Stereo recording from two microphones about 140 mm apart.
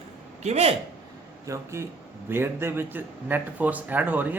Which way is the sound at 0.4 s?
50° right (ahead or behind).